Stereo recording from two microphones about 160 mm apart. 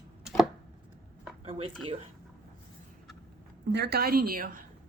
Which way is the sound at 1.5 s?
35° right (ahead or behind).